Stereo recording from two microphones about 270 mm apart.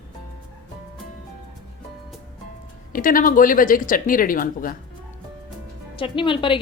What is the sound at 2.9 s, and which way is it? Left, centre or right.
Speech, left.